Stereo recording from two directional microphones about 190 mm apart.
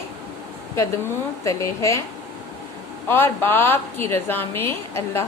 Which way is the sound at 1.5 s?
15° left (ahead or behind).